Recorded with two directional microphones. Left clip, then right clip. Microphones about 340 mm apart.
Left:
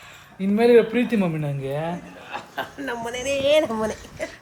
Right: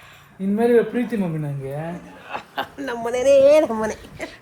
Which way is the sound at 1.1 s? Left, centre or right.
Centre.